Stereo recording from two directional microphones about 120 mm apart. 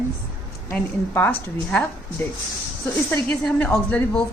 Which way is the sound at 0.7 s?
15° left (ahead or behind).